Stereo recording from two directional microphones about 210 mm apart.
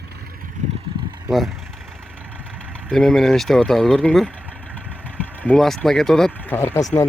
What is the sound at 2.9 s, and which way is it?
Speech, centre (ahead or behind).